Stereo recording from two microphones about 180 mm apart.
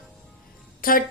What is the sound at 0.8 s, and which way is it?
Speech, 55° left (ahead or behind).